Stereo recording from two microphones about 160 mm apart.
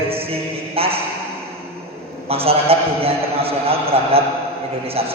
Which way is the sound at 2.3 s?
35° right (ahead or behind).